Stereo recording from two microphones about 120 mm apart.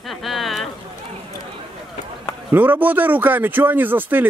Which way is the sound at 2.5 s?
15° right (ahead or behind).